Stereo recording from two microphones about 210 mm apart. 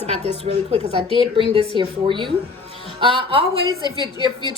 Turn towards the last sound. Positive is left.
turn(degrees=20)  # may be behind; listen again after turning